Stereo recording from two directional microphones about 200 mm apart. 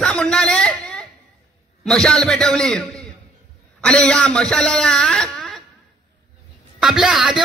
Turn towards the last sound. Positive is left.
turn(degrees=0)  # may be behind; listen again after turning